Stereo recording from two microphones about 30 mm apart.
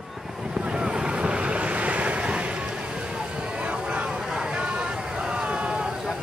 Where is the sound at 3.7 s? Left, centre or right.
Right.